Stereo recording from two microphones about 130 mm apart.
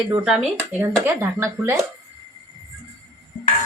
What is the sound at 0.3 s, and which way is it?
Speech, 5° right (ahead or behind).